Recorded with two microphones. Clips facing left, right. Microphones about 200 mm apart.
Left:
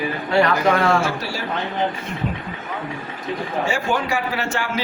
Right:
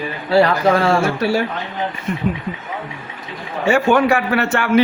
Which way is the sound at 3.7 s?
65° right (ahead or behind).